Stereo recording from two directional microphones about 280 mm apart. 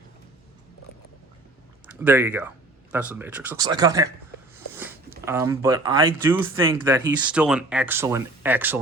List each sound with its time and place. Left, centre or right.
1.9 s speech: centre